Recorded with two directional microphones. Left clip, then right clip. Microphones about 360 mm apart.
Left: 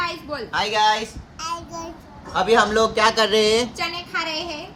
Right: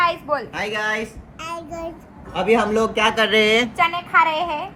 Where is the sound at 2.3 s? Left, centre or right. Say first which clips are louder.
Left 1 dB; centre.